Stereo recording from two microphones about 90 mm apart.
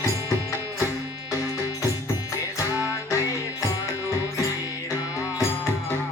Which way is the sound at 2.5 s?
35° left (ahead or behind).